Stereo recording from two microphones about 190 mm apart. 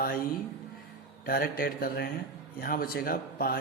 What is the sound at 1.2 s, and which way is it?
A man's voice, 50° left (ahead or behind).